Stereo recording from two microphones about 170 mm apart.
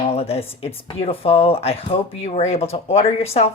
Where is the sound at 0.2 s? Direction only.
35° left (ahead or behind).